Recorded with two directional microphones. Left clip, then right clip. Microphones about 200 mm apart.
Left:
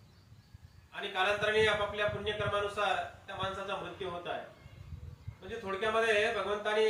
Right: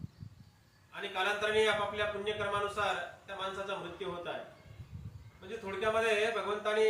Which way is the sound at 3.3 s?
Centre (ahead or behind).